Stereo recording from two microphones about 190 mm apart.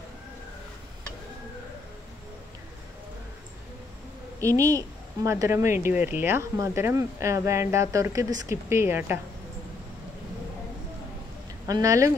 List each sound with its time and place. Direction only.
4.4 s speech: 15° right (ahead or behind)
11.6 s speech: 15° right (ahead or behind)